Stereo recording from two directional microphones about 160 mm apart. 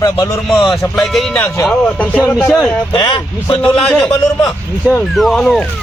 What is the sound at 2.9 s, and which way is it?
Speech, 25° left (ahead or behind).